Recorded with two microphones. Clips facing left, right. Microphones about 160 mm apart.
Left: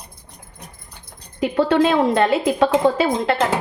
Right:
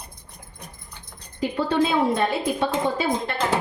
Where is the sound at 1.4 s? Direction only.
90° left.